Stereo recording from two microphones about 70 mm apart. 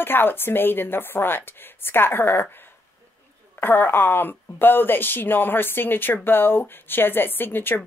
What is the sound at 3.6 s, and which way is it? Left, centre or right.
Speech, left.